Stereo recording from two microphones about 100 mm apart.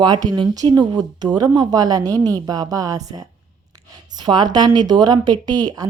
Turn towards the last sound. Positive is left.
turn(degrees=-45)  # may be behind; listen again after turning